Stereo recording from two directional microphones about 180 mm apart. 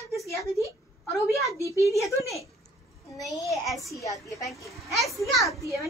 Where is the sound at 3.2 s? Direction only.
Centre (ahead or behind).